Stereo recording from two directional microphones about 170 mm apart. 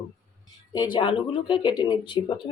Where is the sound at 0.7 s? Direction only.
25° left (ahead or behind).